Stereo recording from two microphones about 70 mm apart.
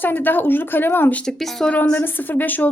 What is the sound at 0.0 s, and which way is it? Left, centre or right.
A woman's voice, left.